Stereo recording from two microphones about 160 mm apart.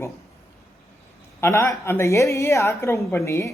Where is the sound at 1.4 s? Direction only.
15° left (ahead or behind).